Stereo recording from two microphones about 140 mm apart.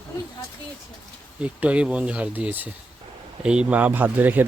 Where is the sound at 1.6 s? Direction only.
10° right (ahead or behind).